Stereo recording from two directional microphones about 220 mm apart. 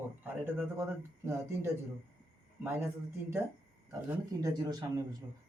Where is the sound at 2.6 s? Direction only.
10° right (ahead or behind).